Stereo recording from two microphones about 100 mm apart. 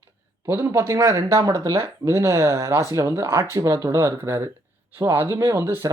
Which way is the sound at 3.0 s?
30° right (ahead or behind).